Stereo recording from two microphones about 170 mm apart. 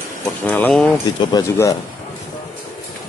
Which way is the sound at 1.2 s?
20° left (ahead or behind).